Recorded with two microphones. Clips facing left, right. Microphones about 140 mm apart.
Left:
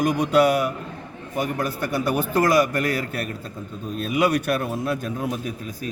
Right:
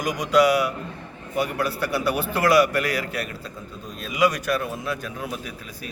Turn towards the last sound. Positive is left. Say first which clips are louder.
# left 6 dB
turn(degrees=45)  # may be behind; listen again after turning